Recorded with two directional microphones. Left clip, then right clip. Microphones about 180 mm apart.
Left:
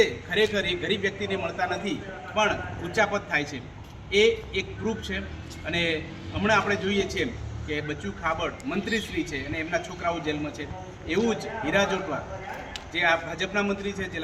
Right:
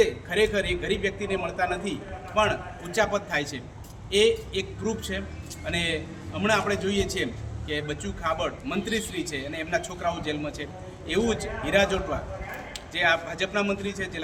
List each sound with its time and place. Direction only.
0.0 s speech: 20° right (ahead or behind)